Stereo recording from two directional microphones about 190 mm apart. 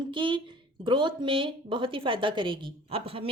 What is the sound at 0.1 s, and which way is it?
A woman's voice, 25° right (ahead or behind).